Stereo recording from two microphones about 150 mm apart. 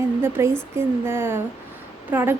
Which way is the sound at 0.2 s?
15° right (ahead or behind).